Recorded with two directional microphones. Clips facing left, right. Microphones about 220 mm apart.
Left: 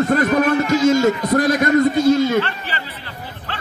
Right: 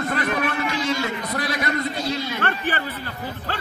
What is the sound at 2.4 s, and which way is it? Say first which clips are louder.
Speech: right 4 dB; 50° right (ahead or behind).